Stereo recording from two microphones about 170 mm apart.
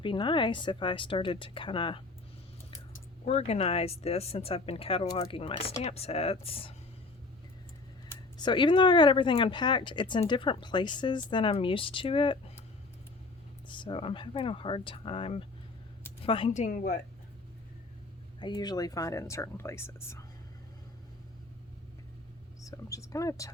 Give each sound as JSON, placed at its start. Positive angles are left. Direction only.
{"t": 0.0, "sound": "speech", "side_deg": 30}
{"t": 3.2, "sound": "speech", "side_deg": 40}
{"t": 8.4, "sound": "speech", "side_deg": 25}
{"t": 13.7, "sound": "speech", "side_deg": 30}
{"t": 18.3, "sound": "speech", "side_deg": 25}
{"t": 22.6, "sound": "speech", "side_deg": 20}